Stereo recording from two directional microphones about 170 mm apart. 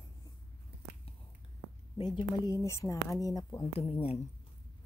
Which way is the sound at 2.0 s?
25° left (ahead or behind).